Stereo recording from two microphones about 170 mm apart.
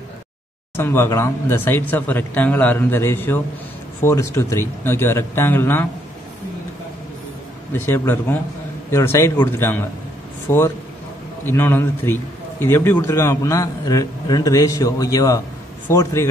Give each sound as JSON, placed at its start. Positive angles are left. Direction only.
{"t": 0.7, "sound": "speech", "side_deg": 15}
{"t": 7.7, "sound": "a man's voice", "side_deg": 10}